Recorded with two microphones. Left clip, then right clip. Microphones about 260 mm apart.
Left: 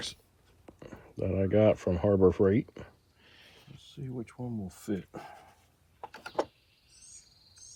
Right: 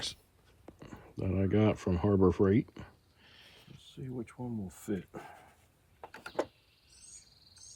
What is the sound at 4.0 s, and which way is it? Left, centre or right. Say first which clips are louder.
Speech: left 1 dB; centre.